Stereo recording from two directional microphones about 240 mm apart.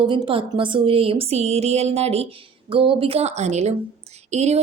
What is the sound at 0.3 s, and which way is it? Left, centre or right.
Speech, right.